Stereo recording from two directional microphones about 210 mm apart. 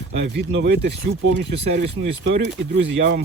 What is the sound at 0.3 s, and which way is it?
Speech, 55° right (ahead or behind).